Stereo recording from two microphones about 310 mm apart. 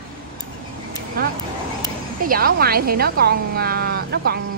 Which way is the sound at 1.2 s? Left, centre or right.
Right.